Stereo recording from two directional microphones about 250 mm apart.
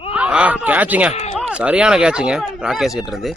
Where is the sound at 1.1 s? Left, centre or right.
Left.